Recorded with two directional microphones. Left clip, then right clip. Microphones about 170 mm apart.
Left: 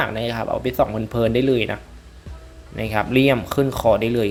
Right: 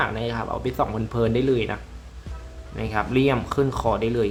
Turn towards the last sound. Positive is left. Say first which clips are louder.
# left 5 dB
turn(degrees=25)  # may be behind; listen again after turning